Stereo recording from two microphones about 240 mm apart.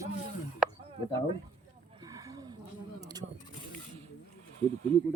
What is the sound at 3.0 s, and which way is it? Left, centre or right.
Vehicle, centre.